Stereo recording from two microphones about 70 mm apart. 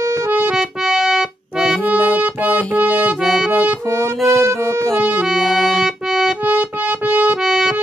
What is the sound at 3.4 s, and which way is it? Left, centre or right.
Accordion, right.